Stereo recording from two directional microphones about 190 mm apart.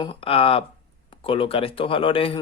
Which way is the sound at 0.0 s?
30° left (ahead or behind).